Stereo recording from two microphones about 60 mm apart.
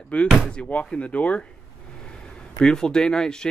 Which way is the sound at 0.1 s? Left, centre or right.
Left.